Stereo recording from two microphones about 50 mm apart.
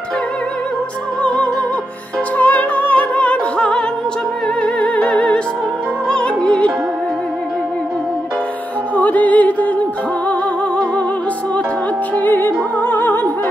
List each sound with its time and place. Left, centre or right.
1.2 s music: left
3.5 s music: centre
8.9 s music: left
12.2 s music: left